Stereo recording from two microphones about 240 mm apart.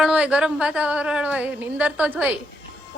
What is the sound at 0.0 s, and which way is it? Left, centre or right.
A woman's voice, centre.